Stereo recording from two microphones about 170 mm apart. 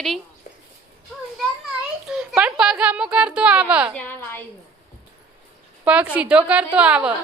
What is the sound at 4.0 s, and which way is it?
Speech, 10° left (ahead or behind).